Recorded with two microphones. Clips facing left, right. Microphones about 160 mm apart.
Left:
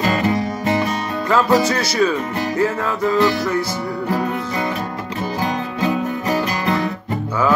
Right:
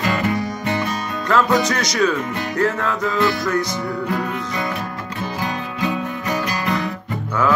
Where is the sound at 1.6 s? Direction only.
5° left (ahead or behind).